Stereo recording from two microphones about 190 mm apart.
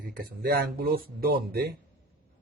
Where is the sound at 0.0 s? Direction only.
50° right (ahead or behind).